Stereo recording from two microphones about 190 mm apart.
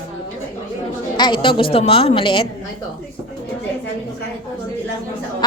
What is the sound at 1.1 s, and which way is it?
A woman's voice, 25° left (ahead or behind).